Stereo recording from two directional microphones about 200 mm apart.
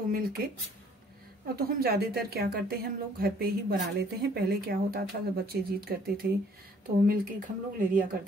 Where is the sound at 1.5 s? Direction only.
50° right (ahead or behind).